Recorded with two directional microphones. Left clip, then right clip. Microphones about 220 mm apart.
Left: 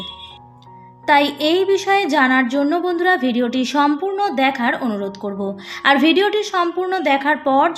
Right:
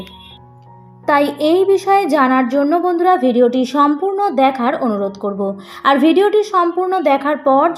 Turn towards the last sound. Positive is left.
turn(degrees=15)  # may be behind; listen again after turning